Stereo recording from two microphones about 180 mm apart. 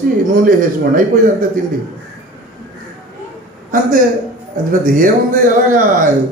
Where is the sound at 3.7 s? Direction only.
50° right (ahead or behind).